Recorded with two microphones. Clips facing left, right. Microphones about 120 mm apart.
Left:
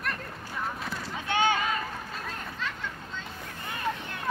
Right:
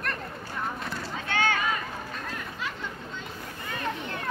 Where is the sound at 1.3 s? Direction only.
20° left (ahead or behind).